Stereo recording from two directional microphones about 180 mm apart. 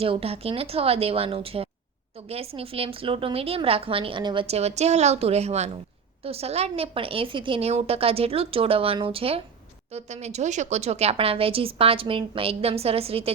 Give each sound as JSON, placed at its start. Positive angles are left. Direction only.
{"t": 0.0, "sound": "a woman's voice", "side_deg": -30}